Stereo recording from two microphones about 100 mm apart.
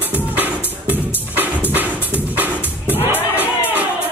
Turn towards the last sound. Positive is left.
turn(degrees=-15)  # may be behind; listen again after turning